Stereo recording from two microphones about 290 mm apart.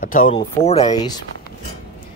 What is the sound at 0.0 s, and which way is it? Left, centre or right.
Speech, left.